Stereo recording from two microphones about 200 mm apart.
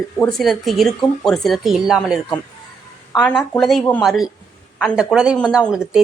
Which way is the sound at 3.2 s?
10° left (ahead or behind).